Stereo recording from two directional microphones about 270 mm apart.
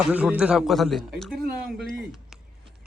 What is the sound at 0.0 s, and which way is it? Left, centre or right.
Speech, centre.